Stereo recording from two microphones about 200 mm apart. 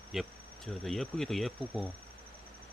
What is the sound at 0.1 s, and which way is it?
Speech, centre (ahead or behind).